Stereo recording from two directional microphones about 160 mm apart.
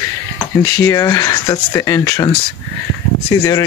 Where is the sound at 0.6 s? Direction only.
20° left (ahead or behind).